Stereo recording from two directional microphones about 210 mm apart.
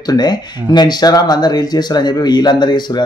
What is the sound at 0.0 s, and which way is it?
Speech, 20° left (ahead or behind).